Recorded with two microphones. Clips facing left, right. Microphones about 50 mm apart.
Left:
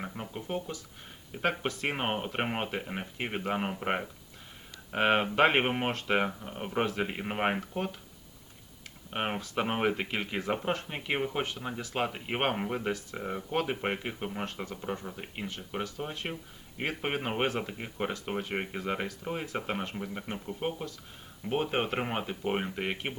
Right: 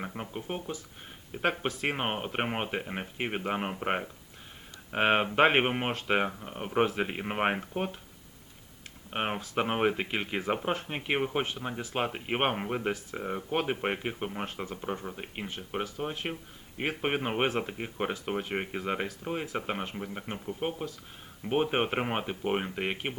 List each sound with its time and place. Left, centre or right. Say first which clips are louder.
0.0 s speech: right 1 dB; centre
1.4 s speech: right 1 dB; centre
9.0 s speech: right 1 dB; centre
10.8 s speech: right 2 dB; right
13.5 s speech: right 1 dB; centre
22.5 s speech: right 1 dB; centre